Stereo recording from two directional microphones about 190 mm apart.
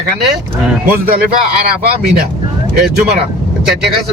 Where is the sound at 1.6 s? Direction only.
50° right (ahead or behind).